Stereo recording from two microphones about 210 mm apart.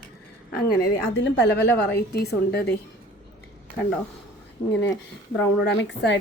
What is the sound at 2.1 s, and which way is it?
Speech, 50° left (ahead or behind).